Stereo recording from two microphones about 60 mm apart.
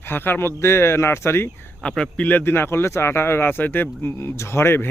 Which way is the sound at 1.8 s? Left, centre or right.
Centre.